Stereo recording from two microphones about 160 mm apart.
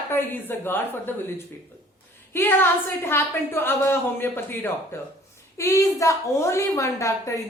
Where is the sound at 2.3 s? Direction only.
15° left (ahead or behind).